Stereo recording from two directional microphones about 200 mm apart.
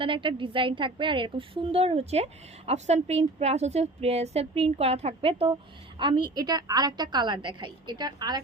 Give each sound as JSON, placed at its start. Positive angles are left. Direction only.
{"t": 0.0, "sound": "a woman's voice", "side_deg": -25}